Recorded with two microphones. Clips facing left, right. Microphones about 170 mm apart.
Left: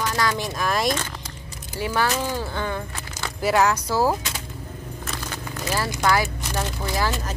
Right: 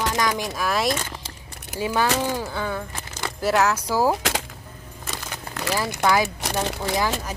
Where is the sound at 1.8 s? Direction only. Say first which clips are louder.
Right 1 dB; 15° right (ahead or behind).